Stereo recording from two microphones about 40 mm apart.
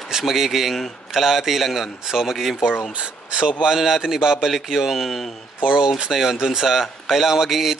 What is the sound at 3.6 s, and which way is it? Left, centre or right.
Speech, centre.